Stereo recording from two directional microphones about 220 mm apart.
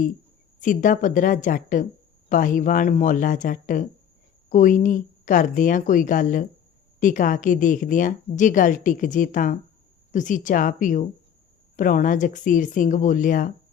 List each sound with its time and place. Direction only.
0.6 s a woman's voice: 35° left (ahead or behind)